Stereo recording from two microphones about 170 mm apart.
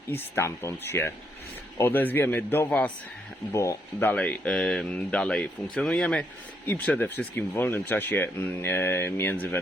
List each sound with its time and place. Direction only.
0.1 s speech: 15° left (ahead or behind)